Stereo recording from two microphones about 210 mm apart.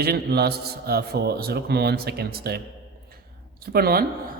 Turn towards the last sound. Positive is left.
turn(degrees=-45)  # may be behind; listen again after turning